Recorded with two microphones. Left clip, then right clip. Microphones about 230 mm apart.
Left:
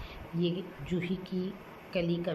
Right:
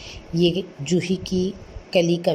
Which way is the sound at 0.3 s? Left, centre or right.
Right.